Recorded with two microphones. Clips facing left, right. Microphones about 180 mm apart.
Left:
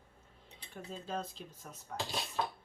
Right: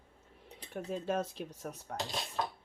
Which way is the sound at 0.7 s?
70° right (ahead or behind).